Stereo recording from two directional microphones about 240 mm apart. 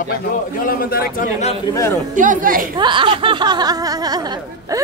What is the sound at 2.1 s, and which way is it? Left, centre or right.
Speech, right.